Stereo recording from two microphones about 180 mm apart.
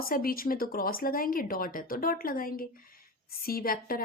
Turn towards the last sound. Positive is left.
turn(degrees=55)  # may be behind; listen again after turning